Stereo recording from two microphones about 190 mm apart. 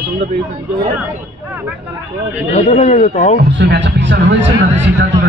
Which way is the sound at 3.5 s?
70° right (ahead or behind).